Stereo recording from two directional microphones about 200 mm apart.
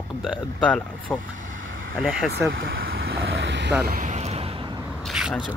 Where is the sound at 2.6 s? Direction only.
50° right (ahead or behind).